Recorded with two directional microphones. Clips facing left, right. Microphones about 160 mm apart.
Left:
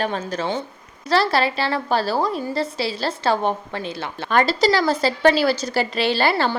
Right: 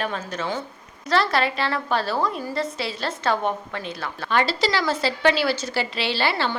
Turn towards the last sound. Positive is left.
turn(degrees=45)  # may be behind; listen again after turning